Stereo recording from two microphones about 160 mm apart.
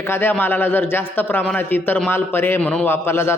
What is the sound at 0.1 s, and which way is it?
A man's voice, 15° left (ahead or behind).